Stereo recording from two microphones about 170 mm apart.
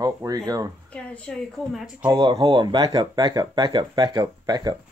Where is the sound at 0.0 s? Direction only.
20° right (ahead or behind).